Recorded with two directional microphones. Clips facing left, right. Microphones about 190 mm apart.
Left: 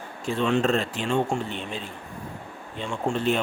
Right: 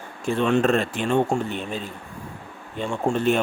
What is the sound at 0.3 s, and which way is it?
Speech, 55° right (ahead or behind).